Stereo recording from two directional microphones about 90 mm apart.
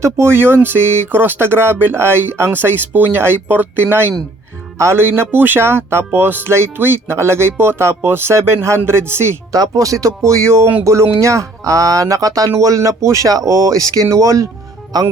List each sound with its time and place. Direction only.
0.0 s speech: 30° right (ahead or behind)
9.5 s speech: 40° right (ahead or behind)